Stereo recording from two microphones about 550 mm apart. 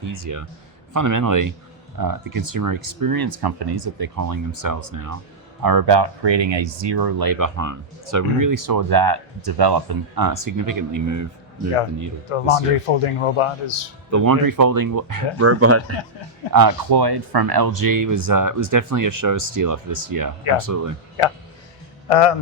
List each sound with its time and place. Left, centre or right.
0.0 s a man's voice: right
12.3 s speech: left
14.1 s speech: right
15.4 s speech: right
16.5 s speech: right
22.1 s speech: left